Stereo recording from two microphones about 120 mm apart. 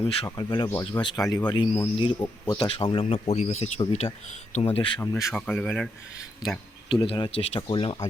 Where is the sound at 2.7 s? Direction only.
45° left (ahead or behind).